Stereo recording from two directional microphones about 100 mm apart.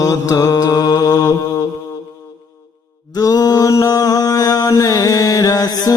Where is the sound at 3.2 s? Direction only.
40° left (ahead or behind).